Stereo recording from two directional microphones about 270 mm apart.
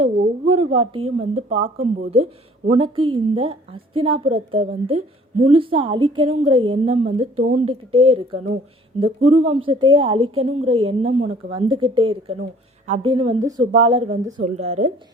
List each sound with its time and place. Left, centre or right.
0.0 s a woman's voice: right